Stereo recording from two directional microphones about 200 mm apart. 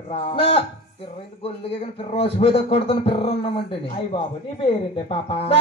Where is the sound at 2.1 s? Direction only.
30° left (ahead or behind).